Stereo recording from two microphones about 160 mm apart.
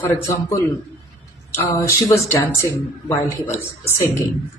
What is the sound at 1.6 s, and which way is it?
A man's voice, 20° left (ahead or behind).